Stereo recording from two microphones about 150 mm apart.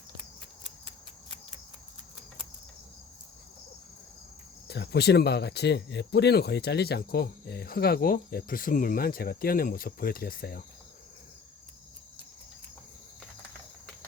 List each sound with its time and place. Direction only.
4.7 s speech: 90° left